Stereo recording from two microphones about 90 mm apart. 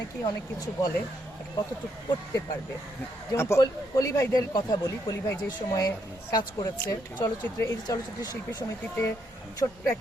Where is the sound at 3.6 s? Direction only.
40° left (ahead or behind).